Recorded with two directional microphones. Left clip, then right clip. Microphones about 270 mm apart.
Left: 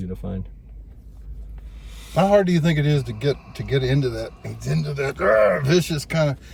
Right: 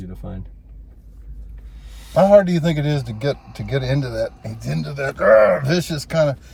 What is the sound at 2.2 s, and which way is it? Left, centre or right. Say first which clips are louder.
Speech: right 5 dB; centre.